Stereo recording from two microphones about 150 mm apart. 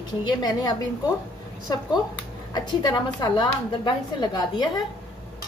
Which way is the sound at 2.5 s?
30° left (ahead or behind).